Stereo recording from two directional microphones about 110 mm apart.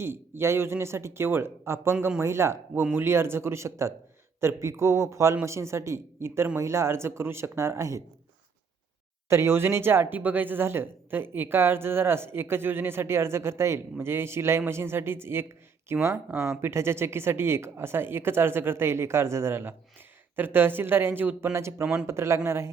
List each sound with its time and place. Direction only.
0.0 s speech: 20° right (ahead or behind)
9.3 s speech: 25° right (ahead or behind)